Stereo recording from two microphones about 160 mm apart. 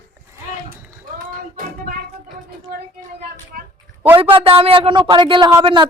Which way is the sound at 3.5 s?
65° right (ahead or behind).